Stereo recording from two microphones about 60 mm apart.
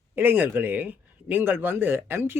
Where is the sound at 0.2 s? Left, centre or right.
Right.